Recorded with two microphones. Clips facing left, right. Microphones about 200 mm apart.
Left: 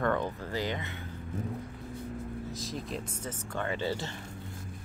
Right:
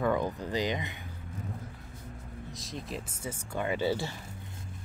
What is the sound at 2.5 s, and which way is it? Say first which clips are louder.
Speech: left 2 dB; centre (ahead or behind).